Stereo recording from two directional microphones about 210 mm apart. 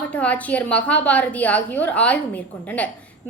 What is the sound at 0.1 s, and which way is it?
A woman's voice, 5° left (ahead or behind).